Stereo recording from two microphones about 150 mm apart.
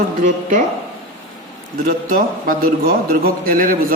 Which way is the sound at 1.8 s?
70° right (ahead or behind).